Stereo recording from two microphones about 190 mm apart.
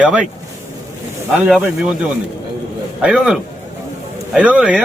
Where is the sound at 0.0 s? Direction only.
5° right (ahead or behind).